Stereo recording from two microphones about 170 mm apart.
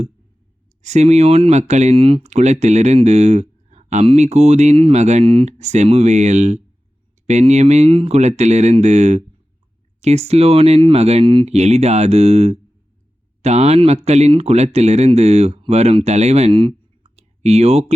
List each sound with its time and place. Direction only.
0.8 s speech: 40° right (ahead or behind)